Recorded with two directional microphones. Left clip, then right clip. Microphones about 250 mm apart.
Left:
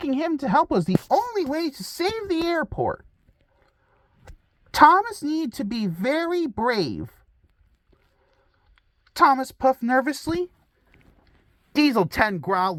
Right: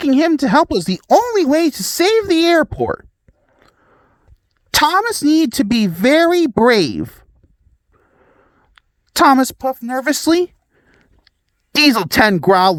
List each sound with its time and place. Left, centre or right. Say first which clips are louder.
0.0 s speech: right 11 dB; right
1.7 s speech: right 13 dB; right
4.7 s speech: right 2 dB; right
9.1 s a woman's voice: right 6 dB; right
9.6 s speech: even; centre
10.2 s speech: right 12 dB; right